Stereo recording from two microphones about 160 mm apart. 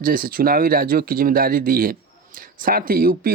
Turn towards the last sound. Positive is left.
turn(degrees=-65)  # may be behind; listen again after turning